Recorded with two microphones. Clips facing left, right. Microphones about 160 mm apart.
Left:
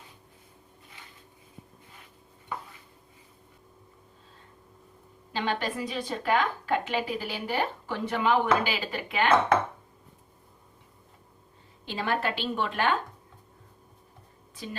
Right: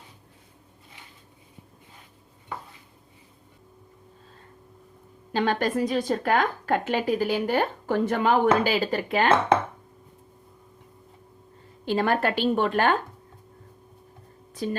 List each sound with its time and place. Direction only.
5.3 s a woman's voice: 45° right (ahead or behind)
11.9 s a woman's voice: 45° right (ahead or behind)